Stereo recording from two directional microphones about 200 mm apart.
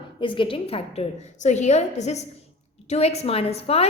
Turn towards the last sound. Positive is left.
turn(degrees=30)  # may be behind; listen again after turning